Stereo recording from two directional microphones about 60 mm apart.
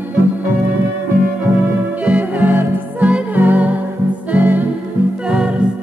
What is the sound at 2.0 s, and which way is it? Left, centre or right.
Music, right.